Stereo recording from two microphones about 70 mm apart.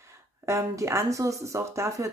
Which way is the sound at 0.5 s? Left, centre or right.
Right.